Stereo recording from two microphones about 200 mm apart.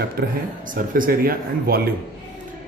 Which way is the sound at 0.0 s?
45° right (ahead or behind).